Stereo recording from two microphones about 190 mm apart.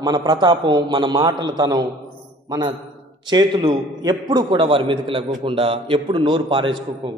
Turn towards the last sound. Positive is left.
turn(degrees=-25)  # may be behind; listen again after turning